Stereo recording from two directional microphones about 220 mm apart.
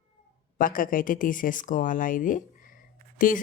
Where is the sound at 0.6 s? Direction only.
40° left (ahead or behind).